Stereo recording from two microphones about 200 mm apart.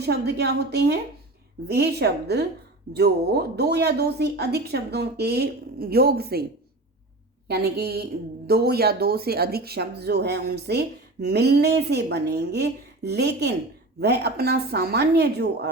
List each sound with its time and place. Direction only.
0.0 s speech: 55° right (ahead or behind)
7.4 s a woman's voice: 55° right (ahead or behind)